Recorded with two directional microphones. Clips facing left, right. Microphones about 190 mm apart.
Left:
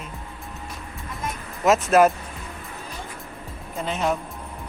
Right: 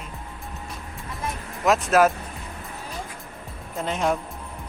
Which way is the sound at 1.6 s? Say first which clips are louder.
Left 2 dB; centre (ahead or behind).